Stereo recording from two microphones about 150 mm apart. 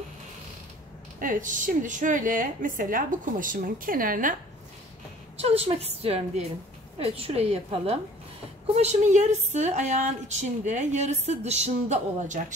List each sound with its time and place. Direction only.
1.2 s a woman's voice: 60° right (ahead or behind)
5.4 s a woman's voice: 40° right (ahead or behind)